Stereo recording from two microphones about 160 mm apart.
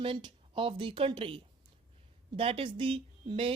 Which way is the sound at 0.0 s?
30° right (ahead or behind).